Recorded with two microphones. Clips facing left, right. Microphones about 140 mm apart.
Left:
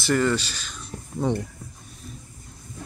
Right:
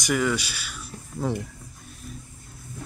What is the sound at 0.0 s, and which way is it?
Speech, 10° right (ahead or behind).